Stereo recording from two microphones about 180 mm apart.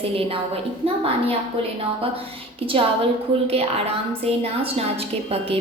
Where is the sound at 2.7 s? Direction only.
30° right (ahead or behind).